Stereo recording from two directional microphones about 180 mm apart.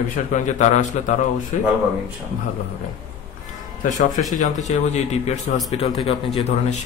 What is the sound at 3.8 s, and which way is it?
Speech, 45° left (ahead or behind).